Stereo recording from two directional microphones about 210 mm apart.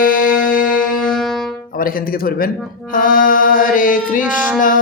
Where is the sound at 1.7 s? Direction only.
45° left (ahead or behind).